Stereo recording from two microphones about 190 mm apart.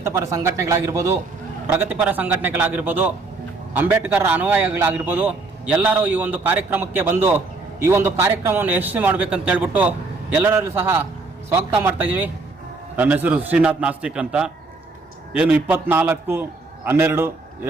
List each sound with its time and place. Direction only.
0.0 s a man's voice: 15° right (ahead or behind)